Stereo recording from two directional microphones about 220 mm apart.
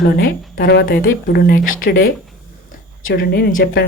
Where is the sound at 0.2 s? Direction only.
40° left (ahead or behind).